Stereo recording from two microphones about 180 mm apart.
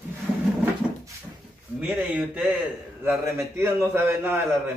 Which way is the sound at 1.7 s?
5° right (ahead or behind).